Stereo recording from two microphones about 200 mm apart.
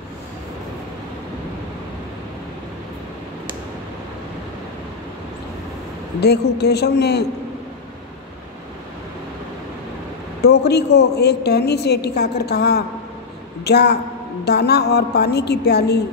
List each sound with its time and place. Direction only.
6.2 s a woman's voice: 55° left (ahead or behind)
10.4 s a woman's voice: 55° left (ahead or behind)